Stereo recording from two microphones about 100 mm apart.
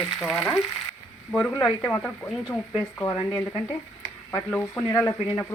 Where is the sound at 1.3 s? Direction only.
10° left (ahead or behind).